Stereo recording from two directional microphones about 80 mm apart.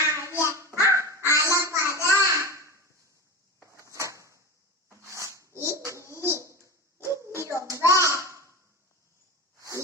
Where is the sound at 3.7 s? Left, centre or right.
Right.